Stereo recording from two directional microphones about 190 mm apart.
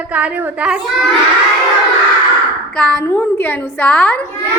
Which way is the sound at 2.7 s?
5° left (ahead or behind).